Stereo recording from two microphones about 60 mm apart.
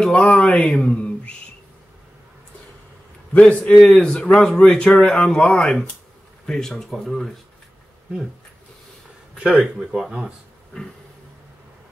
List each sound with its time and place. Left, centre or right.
0.0 s speech: centre
3.3 s a man's voice: centre
9.4 s speech: centre